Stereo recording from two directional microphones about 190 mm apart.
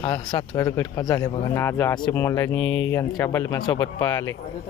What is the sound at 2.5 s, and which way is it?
Speech, 75° left (ahead or behind).